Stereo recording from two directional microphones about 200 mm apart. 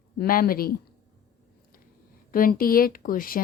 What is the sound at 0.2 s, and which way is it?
Speech, 45° left (ahead or behind).